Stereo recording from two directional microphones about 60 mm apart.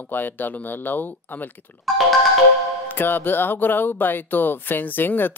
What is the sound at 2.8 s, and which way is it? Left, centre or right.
Speech, left.